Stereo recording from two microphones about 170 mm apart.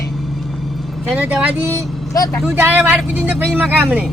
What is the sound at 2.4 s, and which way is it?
Speech, 10° right (ahead or behind).